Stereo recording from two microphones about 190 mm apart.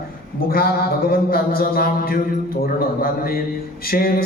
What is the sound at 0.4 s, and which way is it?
Speech, 50° left (ahead or behind).